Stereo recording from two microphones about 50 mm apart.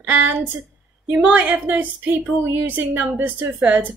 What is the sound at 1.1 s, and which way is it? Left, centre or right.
Speech, right.